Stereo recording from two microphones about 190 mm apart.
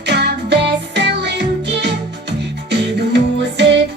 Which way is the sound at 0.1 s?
60° right (ahead or behind).